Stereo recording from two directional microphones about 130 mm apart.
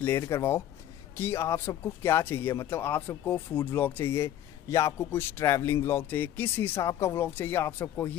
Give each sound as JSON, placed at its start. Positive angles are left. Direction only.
{"t": 0.0, "sound": "speech", "side_deg": 20}